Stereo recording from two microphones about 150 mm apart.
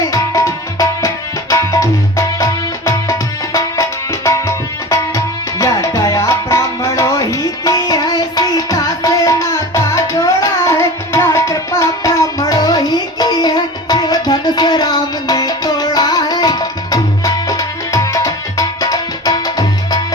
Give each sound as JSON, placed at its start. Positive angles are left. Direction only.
{"t": 0.1, "sound": "music", "side_deg": 20}